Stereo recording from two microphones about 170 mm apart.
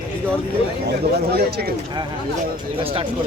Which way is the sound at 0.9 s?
70° right (ahead or behind).